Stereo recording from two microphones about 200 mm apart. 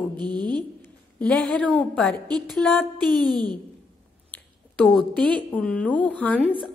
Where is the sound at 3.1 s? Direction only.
20° right (ahead or behind).